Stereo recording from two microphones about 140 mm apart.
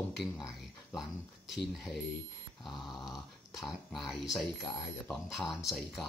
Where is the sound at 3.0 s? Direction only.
Centre (ahead or behind).